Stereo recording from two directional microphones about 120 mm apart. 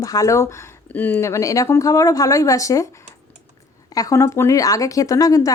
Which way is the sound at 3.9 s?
30° left (ahead or behind).